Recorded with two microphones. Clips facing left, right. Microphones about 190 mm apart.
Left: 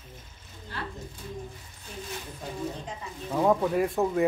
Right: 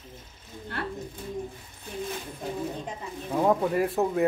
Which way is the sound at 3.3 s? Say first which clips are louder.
Even; 5° right (ahead or behind).